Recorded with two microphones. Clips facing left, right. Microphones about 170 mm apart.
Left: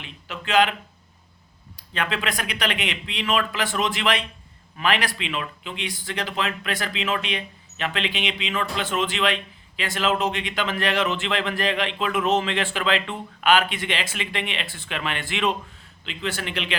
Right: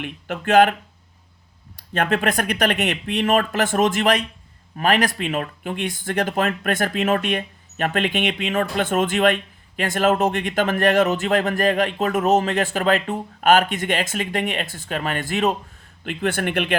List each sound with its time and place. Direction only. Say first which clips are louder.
0.0 s speech: right 8 dB; 50° right (ahead or behind)
1.9 s speech: right 6 dB; 50° right (ahead or behind)
16.0 s speech: right 7 dB; 55° right (ahead or behind)